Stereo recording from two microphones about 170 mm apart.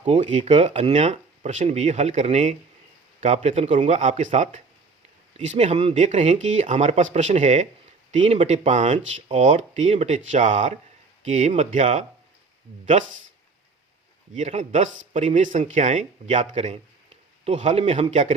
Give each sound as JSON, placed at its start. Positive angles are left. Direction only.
{"t": 0.0, "sound": "speech", "side_deg": -40}
{"t": 14.3, "sound": "speech", "side_deg": -45}